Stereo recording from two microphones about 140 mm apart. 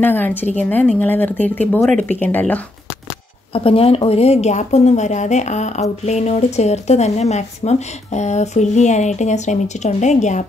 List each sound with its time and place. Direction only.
0.0 s speech: 15° left (ahead or behind)
3.5 s a woman's voice: 40° left (ahead or behind)